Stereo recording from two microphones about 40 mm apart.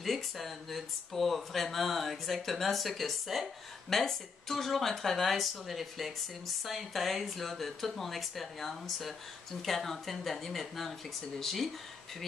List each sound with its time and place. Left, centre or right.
0.0 s speech: centre
3.9 s speech: centre